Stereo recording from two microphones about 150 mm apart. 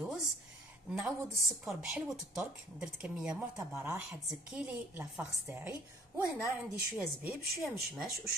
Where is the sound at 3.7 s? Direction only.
20° right (ahead or behind).